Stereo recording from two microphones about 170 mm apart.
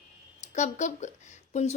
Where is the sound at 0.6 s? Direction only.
45° left (ahead or behind).